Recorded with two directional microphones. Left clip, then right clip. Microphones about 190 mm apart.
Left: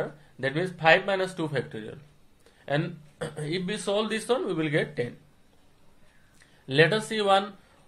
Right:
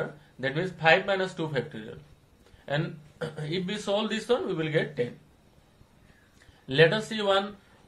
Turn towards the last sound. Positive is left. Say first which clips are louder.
# left 3 dB
turn(degrees=50)  # may be behind; listen again after turning